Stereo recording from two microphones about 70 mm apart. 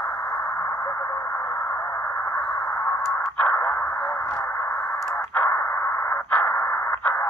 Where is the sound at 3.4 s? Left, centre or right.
Centre.